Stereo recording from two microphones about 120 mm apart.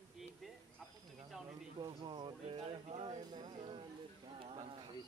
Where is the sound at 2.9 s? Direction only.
45° right (ahead or behind).